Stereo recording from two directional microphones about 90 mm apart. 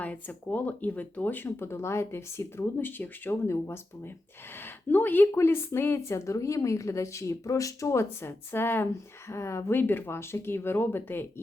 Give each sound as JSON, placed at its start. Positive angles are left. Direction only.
{"t": 0.0, "sound": "a woman's voice", "side_deg": 15}